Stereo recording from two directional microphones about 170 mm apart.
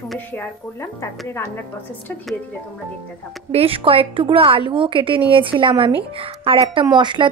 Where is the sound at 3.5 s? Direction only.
35° right (ahead or behind).